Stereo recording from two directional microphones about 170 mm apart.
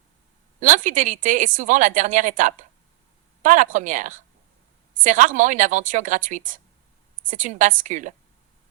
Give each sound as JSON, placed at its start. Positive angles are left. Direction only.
{"t": 0.6, "sound": "speech", "side_deg": -50}